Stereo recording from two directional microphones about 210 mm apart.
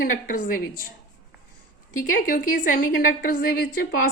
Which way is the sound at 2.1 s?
40° left (ahead or behind).